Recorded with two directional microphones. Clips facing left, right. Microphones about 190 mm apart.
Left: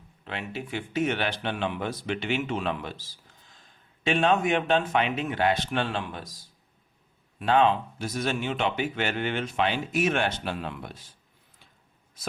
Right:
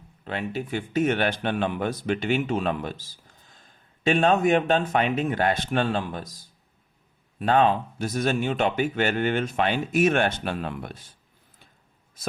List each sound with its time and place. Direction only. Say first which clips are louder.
0.3 s speech: right 5 dB; 45° right (ahead or behind)
7.3 s speech: right 1 dB; 45° right (ahead or behind)